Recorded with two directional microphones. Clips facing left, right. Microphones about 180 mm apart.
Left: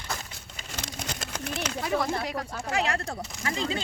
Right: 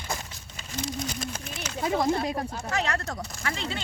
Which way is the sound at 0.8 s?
70° left (ahead or behind).